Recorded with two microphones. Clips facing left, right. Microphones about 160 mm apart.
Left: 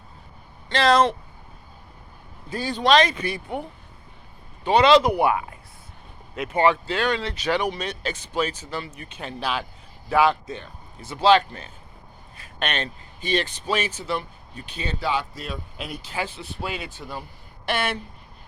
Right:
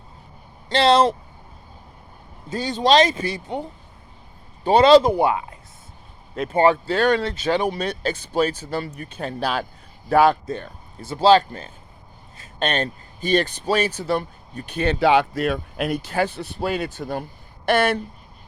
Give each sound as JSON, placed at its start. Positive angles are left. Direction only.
{"t": 0.7, "sound": "speech", "side_deg": -30}
{"t": 2.5, "sound": "speech", "side_deg": -25}
{"t": 2.8, "sound": "speech", "side_deg": -35}
{"t": 4.6, "sound": "speech", "side_deg": -35}
{"t": 7.4, "sound": "speech", "side_deg": -25}
{"t": 11.0, "sound": "a man's voice", "side_deg": -30}
{"t": 14.8, "sound": "speech", "side_deg": -70}